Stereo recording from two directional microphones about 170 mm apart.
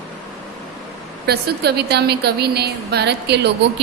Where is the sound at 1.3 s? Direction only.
70° right (ahead or behind).